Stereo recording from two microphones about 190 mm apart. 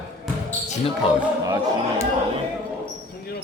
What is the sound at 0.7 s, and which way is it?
Speech, 30° left (ahead or behind).